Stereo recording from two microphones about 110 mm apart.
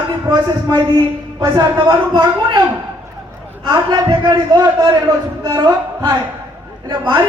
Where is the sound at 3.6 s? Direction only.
40° right (ahead or behind).